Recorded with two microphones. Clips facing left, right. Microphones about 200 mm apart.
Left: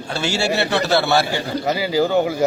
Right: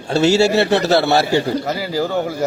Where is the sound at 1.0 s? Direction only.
25° right (ahead or behind).